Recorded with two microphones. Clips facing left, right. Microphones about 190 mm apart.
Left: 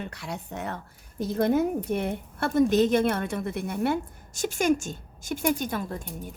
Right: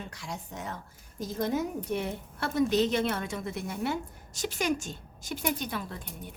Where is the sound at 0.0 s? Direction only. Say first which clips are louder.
Left 4 dB; 60° left (ahead or behind).